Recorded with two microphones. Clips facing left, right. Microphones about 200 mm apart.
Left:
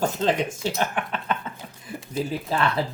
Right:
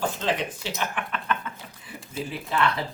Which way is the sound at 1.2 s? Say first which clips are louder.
Left 1 dB; 30° left (ahead or behind).